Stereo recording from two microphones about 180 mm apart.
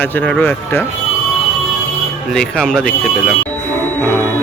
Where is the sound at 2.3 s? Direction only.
5° left (ahead or behind).